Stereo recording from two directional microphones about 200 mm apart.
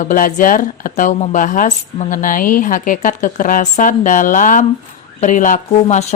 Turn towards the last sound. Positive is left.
turn(degrees=40)  # may be behind; listen again after turning